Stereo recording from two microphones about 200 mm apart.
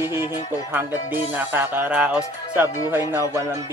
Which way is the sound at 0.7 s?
10° right (ahead or behind).